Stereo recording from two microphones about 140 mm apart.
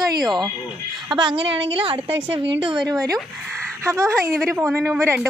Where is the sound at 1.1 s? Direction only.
35° right (ahead or behind).